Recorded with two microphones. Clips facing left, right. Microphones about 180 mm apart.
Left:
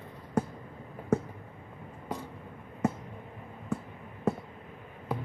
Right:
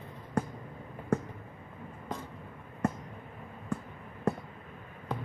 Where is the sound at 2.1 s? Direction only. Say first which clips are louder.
Left 2 dB; 10° left (ahead or behind).